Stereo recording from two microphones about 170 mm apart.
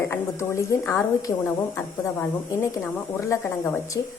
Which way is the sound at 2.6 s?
15° left (ahead or behind).